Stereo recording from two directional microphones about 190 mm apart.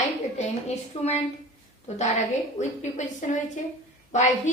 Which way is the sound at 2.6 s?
40° left (ahead or behind).